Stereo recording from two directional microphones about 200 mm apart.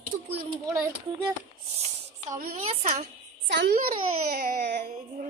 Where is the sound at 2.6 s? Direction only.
30° right (ahead or behind).